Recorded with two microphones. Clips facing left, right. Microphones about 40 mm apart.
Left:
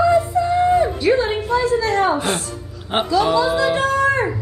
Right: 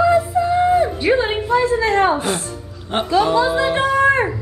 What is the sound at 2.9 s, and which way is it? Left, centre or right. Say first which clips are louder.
Speech: left 1 dB; centre.